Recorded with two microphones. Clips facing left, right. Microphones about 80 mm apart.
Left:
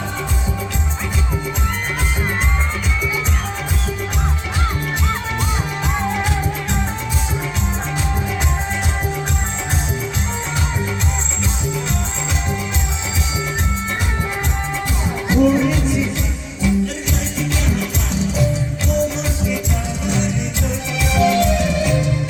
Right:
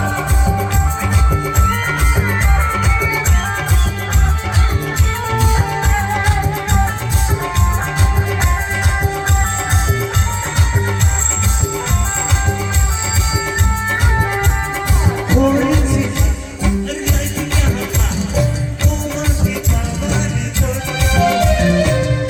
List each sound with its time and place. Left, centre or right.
15.3 s music: right
21.0 s music: right